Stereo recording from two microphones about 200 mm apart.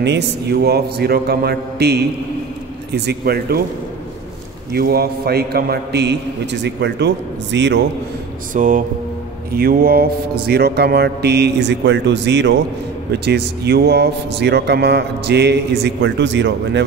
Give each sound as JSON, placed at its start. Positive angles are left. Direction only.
{"t": 0.0, "sound": "speech", "side_deg": -60}
{"t": 4.7, "sound": "speech", "side_deg": -50}
{"t": 8.5, "sound": "speech", "side_deg": -40}